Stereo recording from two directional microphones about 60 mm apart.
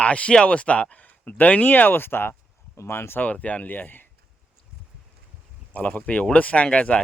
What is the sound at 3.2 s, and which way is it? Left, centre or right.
Speech, left.